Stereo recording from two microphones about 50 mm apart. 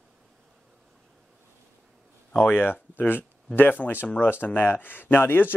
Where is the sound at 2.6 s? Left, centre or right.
Left.